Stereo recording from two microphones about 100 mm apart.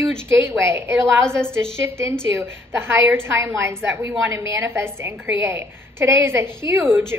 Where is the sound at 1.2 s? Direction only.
10° left (ahead or behind).